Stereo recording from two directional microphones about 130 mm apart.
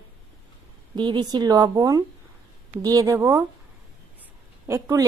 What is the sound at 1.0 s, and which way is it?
Speech, 35° right (ahead or behind).